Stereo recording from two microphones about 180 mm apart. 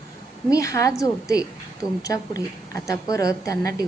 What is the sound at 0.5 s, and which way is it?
A woman's voice, 20° left (ahead or behind).